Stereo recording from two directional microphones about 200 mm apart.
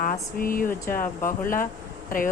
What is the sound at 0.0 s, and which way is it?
A woman's voice, 45° left (ahead or behind).